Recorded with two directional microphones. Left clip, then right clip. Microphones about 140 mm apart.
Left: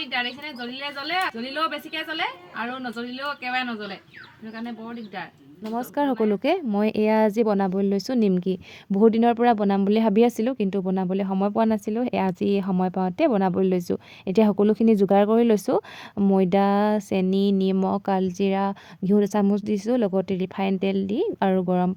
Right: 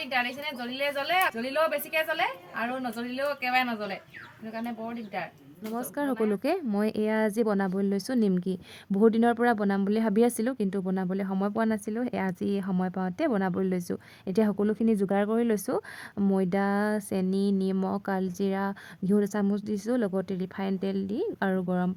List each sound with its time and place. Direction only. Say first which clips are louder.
0.1 s a woman's voice: right 2 dB; 10° right (ahead or behind)
5.7 s speech: left 6 dB; 25° left (ahead or behind)
16.1 s speech: left 6 dB; 15° left (ahead or behind)
16.4 s speech: left 8 dB; 25° left (ahead or behind)